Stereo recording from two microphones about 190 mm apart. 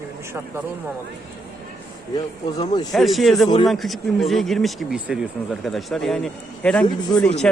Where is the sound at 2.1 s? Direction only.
20° left (ahead or behind).